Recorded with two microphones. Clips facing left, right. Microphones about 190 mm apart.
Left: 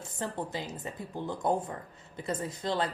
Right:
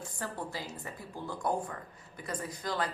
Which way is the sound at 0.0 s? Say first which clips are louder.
Left 3 dB; 25° left (ahead or behind).